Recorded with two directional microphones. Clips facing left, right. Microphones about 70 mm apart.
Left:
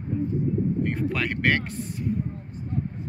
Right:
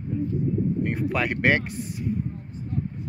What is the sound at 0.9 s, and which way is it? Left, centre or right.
Speech, centre.